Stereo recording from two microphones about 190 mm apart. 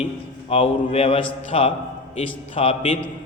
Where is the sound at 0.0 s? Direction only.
30° left (ahead or behind).